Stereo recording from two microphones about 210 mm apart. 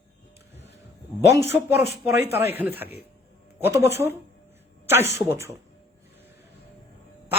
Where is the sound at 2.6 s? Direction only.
10° right (ahead or behind).